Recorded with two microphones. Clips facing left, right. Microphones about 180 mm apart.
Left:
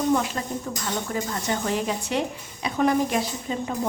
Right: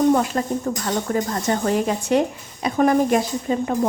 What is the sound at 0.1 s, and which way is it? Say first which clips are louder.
Speech: right 5 dB; 50° right (ahead or behind).